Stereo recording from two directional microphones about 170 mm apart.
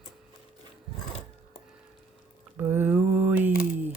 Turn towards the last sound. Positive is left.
turn(degrees=-10)  # may be behind; listen again after turning